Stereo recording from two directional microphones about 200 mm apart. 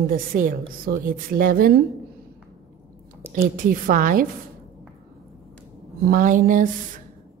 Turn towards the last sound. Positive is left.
turn(degrees=-40)  # may be behind; listen again after turning